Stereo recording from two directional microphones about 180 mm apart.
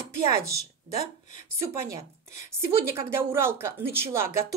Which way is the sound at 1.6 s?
15° right (ahead or behind).